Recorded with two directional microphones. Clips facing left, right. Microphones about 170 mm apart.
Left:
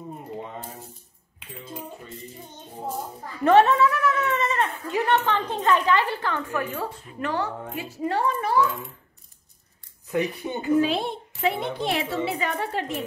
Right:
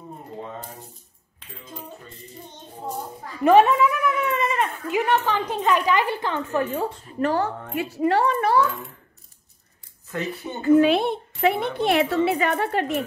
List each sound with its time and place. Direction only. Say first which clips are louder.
3.4 s a sound: right 1 dB; 15° right (ahead or behind)
5.0 s speech: left 1 dB; 5° right (ahead or behind); by 6.9 s 20° right (ahead or behind)
7.1 s speech: right 5 dB; 40° right (ahead or behind)
7.7 s a child's voice: right 7 dB; 65° right (ahead or behind)
10.1 s speech: left 3 dB; 15° left (ahead or behind)
10.8 s a woman's voice: right 5 dB; 60° right (ahead or behind)